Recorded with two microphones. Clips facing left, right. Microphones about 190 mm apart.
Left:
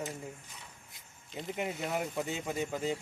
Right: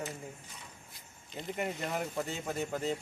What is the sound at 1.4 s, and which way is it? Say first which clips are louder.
Speech: even; centre (ahead or behind).